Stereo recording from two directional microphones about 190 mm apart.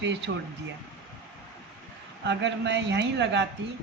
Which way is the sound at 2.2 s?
65° right (ahead or behind).